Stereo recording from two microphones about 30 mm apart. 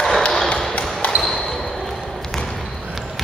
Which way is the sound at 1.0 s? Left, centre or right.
Left.